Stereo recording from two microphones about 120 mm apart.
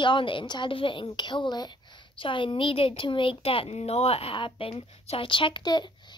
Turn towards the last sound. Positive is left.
turn(degrees=40)  # may be behind; listen again after turning